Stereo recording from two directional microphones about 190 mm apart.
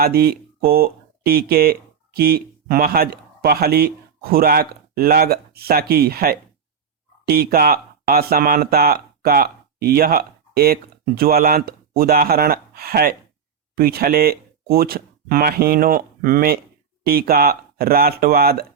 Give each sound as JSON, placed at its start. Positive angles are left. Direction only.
{"t": 0.0, "sound": "speech", "side_deg": -55}